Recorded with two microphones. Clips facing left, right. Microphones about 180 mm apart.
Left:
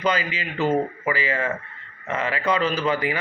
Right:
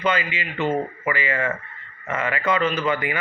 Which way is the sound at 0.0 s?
40° left (ahead or behind).